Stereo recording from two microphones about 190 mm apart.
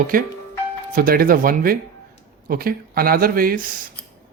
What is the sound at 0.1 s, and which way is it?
Speech, 45° right (ahead or behind).